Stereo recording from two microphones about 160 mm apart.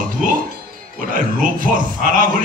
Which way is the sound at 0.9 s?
60° right (ahead or behind).